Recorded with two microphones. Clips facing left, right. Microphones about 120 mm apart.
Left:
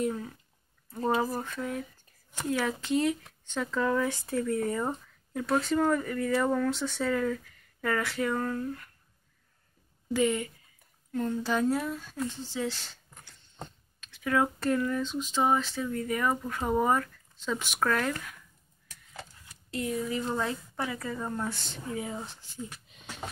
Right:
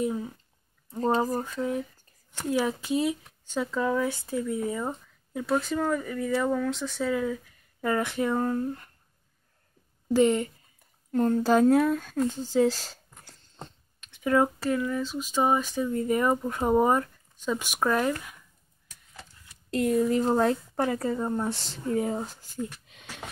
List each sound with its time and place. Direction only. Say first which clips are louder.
0.0 s speech: right 2 dB; 15° right (ahead or behind); by 8.9 s 30° right (ahead or behind)
10.1 s speech: right 5 dB; 35° right (ahead or behind)
11.1 s speech: right 7 dB; 45° right (ahead or behind)
14.1 s speech: right 4 dB; 20° right (ahead or behind)
14.6 s speech: right 1 dB; 5° right (ahead or behind)
19.7 s speech: right 8 dB; 50° right (ahead or behind)
21.1 s speech: right 5 dB; 20° right (ahead or behind)
21.9 s speech: right 8 dB; 40° right (ahead or behind)
22.8 s a sound: right 1 dB; 90° right